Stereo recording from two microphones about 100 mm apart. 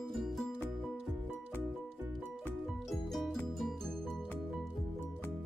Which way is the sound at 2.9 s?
Centre (ahead or behind).